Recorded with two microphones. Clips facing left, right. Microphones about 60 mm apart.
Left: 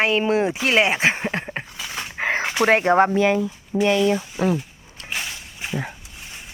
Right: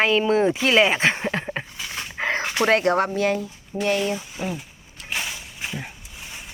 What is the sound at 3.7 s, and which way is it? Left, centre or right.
Speech, left.